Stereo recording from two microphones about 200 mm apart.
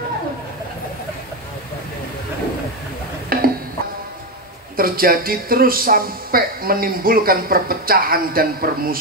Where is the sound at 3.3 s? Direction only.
45° right (ahead or behind).